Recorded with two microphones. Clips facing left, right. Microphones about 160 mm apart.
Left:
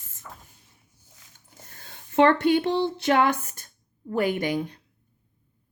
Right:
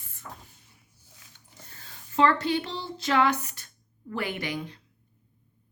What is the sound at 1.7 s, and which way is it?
Speech, 50° left (ahead or behind).